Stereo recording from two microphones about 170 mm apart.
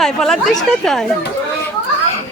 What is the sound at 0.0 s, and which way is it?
Speech, centre (ahead or behind).